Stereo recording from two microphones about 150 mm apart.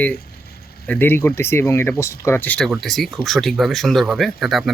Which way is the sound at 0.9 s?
15° left (ahead or behind).